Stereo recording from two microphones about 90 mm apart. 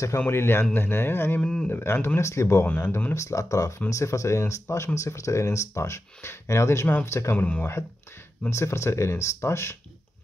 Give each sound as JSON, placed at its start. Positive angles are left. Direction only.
{"t": 0.3, "sound": "speech", "side_deg": 25}
{"t": 1.4, "sound": "speech", "side_deg": 10}
{"t": 1.7, "sound": "speech", "side_deg": 25}
{"t": 3.2, "sound": "speech", "side_deg": 35}
{"t": 7.3, "sound": "speech", "side_deg": 15}
{"t": 8.5, "sound": "speech", "side_deg": 30}